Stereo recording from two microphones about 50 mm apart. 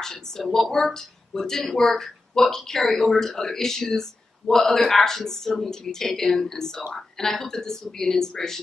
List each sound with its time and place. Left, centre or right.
0.0 s speech: centre